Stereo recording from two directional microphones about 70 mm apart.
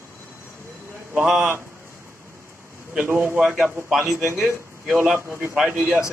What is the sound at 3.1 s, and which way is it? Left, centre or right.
Speech, right.